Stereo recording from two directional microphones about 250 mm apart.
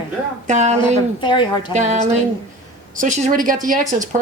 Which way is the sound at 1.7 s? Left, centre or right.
Right.